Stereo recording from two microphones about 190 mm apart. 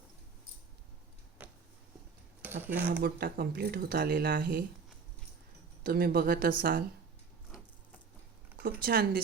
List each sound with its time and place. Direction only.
1.4 s a sound: 5° right (ahead or behind)
2.4 s speech: 10° right (ahead or behind)
2.9 s speech: 55° right (ahead or behind)
5.8 s speech: 55° right (ahead or behind)
8.8 s speech: 50° right (ahead or behind)